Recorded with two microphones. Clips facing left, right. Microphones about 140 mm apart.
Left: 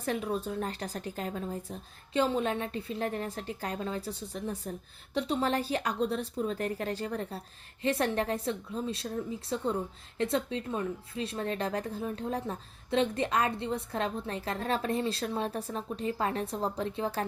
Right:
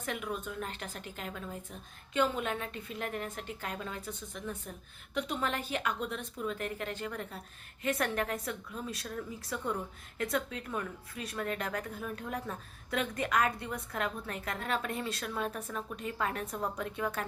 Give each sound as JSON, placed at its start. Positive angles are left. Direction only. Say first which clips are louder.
{"t": 0.0, "sound": "a woman's voice", "louder": "left 5 dB", "side_deg": 35}